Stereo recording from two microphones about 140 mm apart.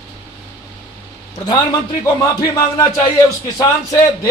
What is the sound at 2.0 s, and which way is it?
Speech, 20° left (ahead or behind).